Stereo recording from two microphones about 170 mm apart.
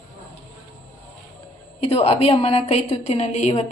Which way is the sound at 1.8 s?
35° left (ahead or behind).